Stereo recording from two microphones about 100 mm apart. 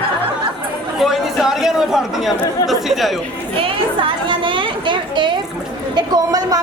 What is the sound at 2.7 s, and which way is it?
Speech, centre (ahead or behind).